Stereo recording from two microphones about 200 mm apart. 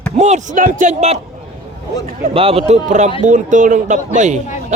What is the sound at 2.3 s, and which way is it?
Speech, 30° right (ahead or behind).